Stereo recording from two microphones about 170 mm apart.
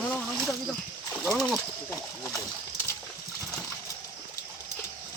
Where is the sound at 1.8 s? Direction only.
20° left (ahead or behind).